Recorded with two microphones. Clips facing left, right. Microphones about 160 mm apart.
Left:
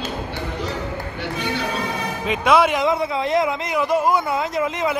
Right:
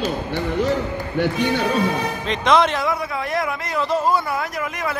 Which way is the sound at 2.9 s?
20° left (ahead or behind).